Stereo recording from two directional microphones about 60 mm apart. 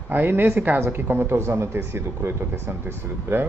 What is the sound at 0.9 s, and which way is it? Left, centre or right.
Speech, right.